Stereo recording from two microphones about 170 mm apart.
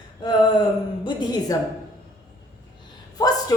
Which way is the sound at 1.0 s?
25° left (ahead or behind).